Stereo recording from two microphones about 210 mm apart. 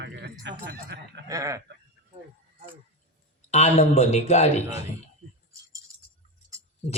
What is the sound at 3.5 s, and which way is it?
A man's voice, 30° left (ahead or behind).